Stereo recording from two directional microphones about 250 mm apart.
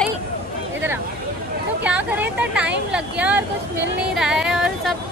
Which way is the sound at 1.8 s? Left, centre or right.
Centre.